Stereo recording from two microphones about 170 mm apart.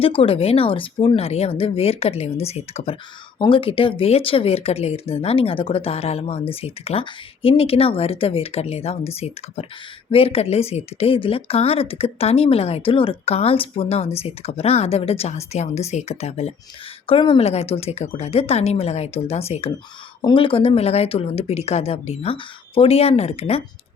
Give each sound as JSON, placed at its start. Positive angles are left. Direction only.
{"t": 0.0, "sound": "speech", "side_deg": 35}